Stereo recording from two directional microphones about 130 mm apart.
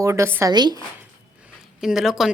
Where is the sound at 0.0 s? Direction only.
20° right (ahead or behind).